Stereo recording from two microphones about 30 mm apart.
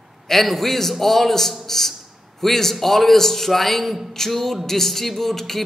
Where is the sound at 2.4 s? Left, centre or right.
Centre.